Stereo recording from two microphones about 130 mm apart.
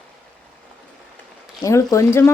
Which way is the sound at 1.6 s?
25° left (ahead or behind).